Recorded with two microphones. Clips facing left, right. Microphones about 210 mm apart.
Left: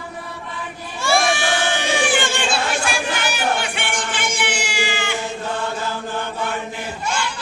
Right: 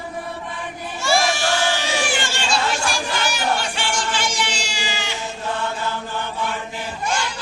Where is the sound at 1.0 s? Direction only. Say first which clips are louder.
Left 1 dB; 55° left (ahead or behind).